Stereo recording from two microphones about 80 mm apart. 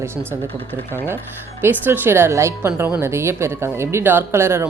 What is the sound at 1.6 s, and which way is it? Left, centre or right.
Speech, right.